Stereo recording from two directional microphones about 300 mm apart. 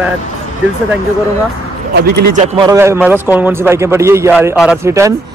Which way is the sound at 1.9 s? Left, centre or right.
Right.